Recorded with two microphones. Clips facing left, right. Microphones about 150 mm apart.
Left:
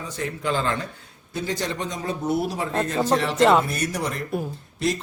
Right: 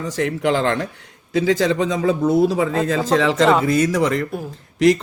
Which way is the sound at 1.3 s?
90° right.